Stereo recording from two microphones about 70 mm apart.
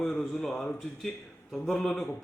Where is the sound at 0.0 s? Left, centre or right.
Centre.